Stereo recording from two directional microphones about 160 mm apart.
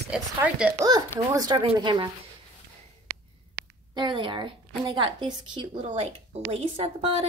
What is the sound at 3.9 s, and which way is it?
A woman's voice, 30° right (ahead or behind).